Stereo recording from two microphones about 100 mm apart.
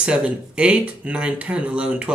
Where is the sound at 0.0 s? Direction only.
10° right (ahead or behind).